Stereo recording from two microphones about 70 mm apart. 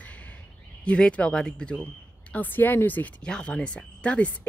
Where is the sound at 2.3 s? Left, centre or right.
Left.